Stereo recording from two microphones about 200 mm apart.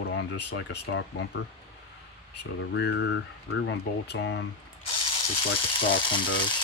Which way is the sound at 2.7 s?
60° left (ahead or behind).